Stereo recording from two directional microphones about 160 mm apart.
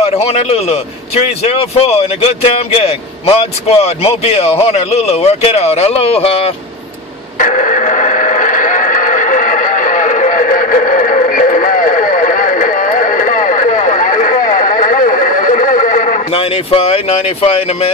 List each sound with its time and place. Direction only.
0.0 s a man's voice: 40° left (ahead or behind)
7.3 s radio: 50° left (ahead or behind)
16.3 s a man's voice: 35° left (ahead or behind)